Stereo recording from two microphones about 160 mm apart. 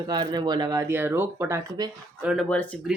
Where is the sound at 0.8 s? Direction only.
15° right (ahead or behind).